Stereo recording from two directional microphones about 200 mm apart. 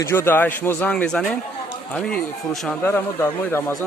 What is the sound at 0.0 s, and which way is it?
Speech, 10° left (ahead or behind).